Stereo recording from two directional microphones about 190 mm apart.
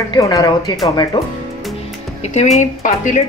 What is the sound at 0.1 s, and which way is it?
Speech, 20° left (ahead or behind).